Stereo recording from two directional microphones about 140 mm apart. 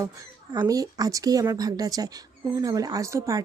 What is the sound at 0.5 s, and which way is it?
Speech, 25° right (ahead or behind).